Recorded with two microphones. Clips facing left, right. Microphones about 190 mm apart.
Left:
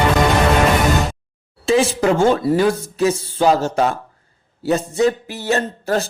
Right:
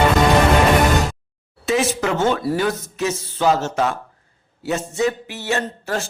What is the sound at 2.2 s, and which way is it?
Speech, 25° left (ahead or behind).